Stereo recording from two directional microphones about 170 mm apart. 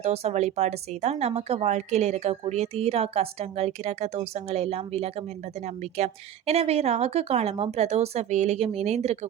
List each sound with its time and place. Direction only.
0.0 s speech: 40° right (ahead or behind)